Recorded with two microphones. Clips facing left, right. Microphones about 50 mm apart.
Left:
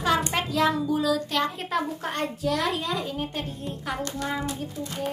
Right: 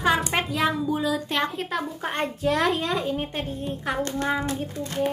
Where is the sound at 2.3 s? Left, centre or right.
Right.